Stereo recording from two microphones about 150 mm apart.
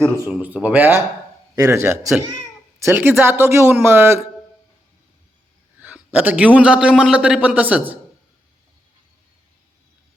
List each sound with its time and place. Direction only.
0.3 s a man's voice: 10° right (ahead or behind)
5.8 s a man's voice: 10° right (ahead or behind)